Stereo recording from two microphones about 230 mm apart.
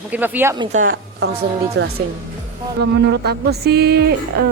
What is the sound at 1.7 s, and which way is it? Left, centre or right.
Speech, right.